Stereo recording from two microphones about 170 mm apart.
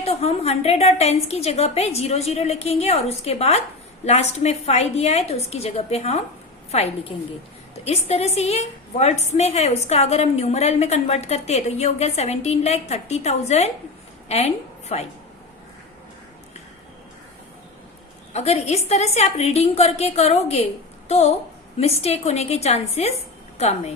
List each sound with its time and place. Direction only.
0.0 s a woman's voice: 35° left (ahead or behind)
18.3 s a woman's voice: 40° left (ahead or behind)